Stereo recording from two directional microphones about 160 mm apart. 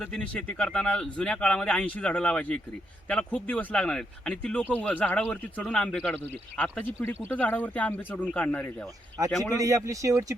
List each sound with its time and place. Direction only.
0.0 s speech: 5° left (ahead or behind)
9.6 s speech: 20° right (ahead or behind)